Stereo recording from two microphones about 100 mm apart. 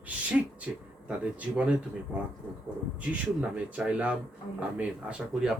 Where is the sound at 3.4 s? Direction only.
10° right (ahead or behind).